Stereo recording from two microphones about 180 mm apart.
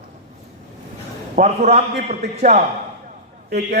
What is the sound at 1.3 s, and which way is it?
A man's voice, 40° right (ahead or behind).